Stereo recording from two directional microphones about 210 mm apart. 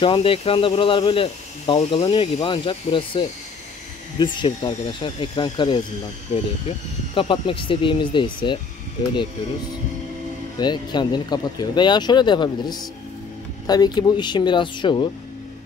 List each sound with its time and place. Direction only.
0.0 s speech: 25° left (ahead or behind)
7.2 s speech: 25° left (ahead or behind)
10.6 s speech: 20° left (ahead or behind)